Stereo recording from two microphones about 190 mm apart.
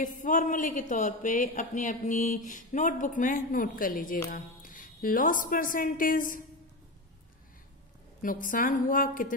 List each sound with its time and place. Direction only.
0.0 s a woman's voice: 45° left (ahead or behind)
8.2 s speech: 45° left (ahead or behind)